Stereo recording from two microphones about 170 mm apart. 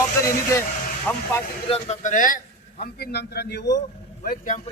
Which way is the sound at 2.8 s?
70° left (ahead or behind).